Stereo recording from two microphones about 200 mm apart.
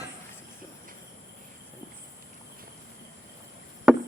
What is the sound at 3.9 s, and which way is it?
Chop, centre (ahead or behind).